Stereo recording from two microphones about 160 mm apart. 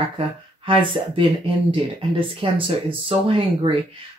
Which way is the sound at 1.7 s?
35° right (ahead or behind).